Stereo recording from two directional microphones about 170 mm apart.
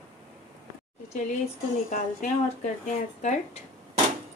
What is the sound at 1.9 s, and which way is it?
Speech, 50° left (ahead or behind).